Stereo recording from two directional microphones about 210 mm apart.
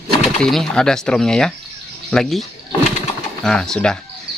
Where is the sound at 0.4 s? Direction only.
Centre (ahead or behind).